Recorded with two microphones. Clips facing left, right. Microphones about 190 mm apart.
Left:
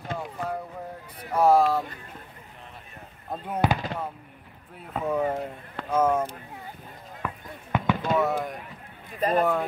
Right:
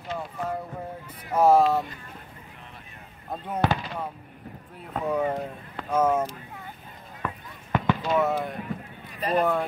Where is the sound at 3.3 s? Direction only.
10° left (ahead or behind).